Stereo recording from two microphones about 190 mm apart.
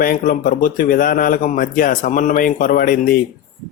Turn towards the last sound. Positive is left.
turn(degrees=45)  # may be behind; listen again after turning